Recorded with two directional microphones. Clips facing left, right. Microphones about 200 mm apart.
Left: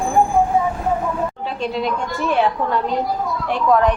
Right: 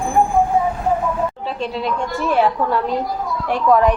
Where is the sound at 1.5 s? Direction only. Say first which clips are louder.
Left 1 dB; centre (ahead or behind).